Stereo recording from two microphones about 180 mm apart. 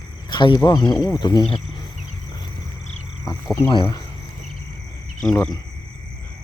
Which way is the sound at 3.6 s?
20° left (ahead or behind).